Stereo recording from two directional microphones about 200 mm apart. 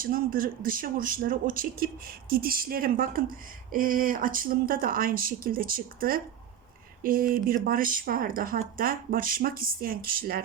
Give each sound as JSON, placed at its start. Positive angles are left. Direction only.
{"t": 0.0, "sound": "speech", "side_deg": -45}